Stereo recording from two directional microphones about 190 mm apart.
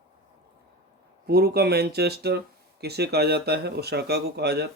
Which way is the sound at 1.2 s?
55° right (ahead or behind).